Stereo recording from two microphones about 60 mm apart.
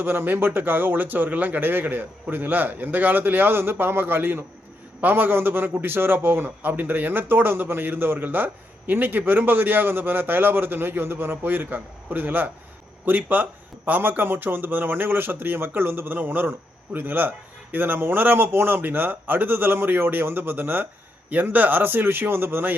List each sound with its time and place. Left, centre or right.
0.0 s a man's voice: right